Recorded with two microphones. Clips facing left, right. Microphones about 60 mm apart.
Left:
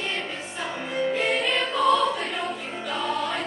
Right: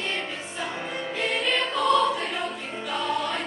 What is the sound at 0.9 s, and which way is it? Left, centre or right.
Music, centre.